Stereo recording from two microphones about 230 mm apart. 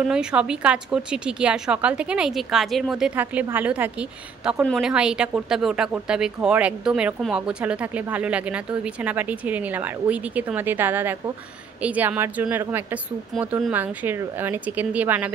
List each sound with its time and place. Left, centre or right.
0.1 s a woman's voice: centre